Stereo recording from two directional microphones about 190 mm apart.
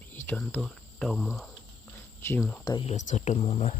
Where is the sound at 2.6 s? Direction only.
20° left (ahead or behind).